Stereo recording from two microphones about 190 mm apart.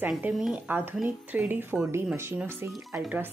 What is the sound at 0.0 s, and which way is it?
Speech, 5° right (ahead or behind).